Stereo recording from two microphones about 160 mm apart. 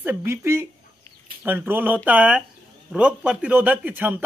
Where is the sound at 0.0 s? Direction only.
15° right (ahead or behind).